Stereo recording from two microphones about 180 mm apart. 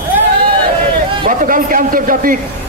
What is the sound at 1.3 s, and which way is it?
A man's voice, 50° right (ahead or behind).